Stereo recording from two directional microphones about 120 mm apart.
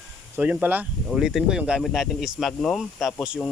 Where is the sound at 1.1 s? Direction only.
Centre (ahead or behind).